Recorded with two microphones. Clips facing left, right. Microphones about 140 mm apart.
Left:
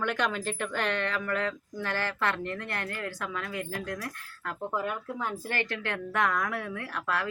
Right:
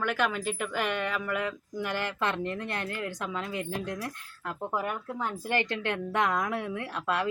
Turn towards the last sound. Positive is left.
turn(degrees=-20)  # may be behind; listen again after turning